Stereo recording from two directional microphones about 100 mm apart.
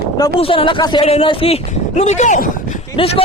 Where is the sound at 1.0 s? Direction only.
75° left (ahead or behind); by 2.1 s 90° left.